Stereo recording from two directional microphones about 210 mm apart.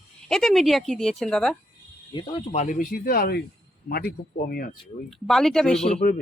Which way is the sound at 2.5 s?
40° left (ahead or behind).